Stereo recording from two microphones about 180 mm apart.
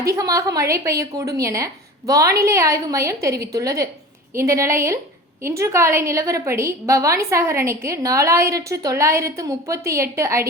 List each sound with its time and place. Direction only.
0.0 s a woman's voice: 20° right (ahead or behind)